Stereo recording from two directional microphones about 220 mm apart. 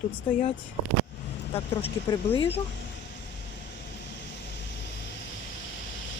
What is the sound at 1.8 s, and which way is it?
Speech, 20° left (ahead or behind).